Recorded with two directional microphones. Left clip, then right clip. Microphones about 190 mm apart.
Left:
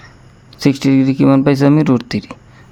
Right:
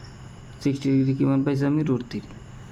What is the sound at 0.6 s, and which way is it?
Speech, 65° left (ahead or behind).